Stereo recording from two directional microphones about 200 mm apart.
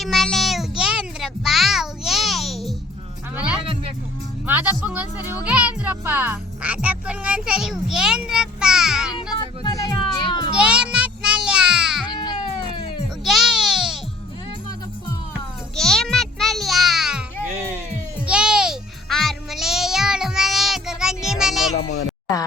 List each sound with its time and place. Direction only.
0.0 s a sound: centre (ahead or behind)
3.3 s music: 5° right (ahead or behind)
4.4 s speech: 5° right (ahead or behind)
9.1 s vehicle: 20° left (ahead or behind)
10.2 s children playing: 20° left (ahead or behind)
10.6 s a sound: 5° right (ahead or behind)
12.1 s baby cry: 20° left (ahead or behind)
13.2 s a sound: centre (ahead or behind)
15.7 s music: centre (ahead or behind)
18.3 s music: 5° right (ahead or behind)
21.8 s speech: 90° left